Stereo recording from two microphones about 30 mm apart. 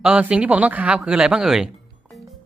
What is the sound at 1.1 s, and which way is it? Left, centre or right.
Speech, right.